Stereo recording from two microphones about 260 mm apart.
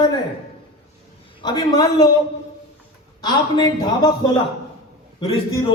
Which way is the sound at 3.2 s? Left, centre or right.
Centre.